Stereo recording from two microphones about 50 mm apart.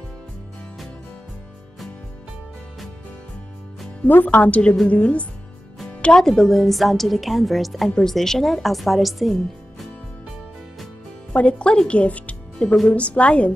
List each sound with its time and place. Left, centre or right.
4.0 s speech: left
5.9 s music: left
6.1 s speech: centre
11.3 s speech: left